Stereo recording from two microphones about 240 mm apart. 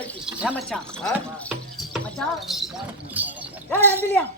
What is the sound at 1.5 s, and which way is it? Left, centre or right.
Clip-clop, centre.